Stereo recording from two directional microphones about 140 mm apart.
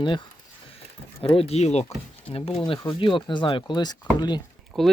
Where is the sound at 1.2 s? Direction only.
45° left (ahead or behind).